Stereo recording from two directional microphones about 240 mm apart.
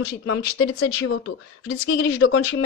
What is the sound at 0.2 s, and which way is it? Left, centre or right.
Speech, left.